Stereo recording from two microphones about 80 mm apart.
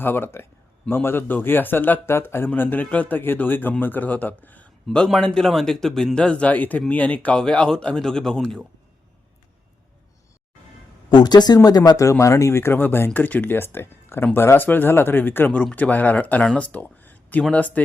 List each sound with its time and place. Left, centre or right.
0.0 s a man's voice: left
5.0 s a man's voice: centre
11.1 s speech: left
11.9 s a man's voice: left; by 16.5 s centre
16.6 s a sound: centre
17.5 s a man's voice: centre